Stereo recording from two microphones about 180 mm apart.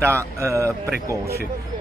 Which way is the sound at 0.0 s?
15° right (ahead or behind).